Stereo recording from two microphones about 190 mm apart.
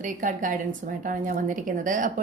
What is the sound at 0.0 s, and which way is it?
A woman's voice, 40° right (ahead or behind).